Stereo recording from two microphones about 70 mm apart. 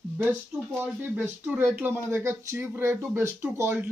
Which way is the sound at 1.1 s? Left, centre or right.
Centre.